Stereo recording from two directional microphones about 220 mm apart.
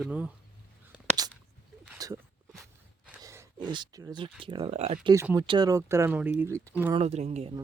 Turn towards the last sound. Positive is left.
turn(degrees=-30)  # may be behind; listen again after turning